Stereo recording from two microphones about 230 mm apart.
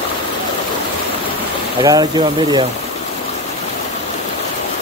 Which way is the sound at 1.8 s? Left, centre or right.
Centre.